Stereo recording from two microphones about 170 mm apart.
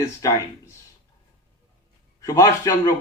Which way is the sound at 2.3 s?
20° left (ahead or behind).